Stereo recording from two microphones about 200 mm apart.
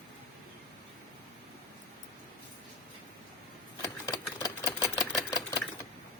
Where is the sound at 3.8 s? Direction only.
15° left (ahead or behind).